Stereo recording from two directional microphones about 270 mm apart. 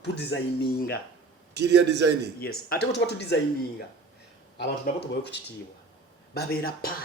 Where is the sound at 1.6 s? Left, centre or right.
Right.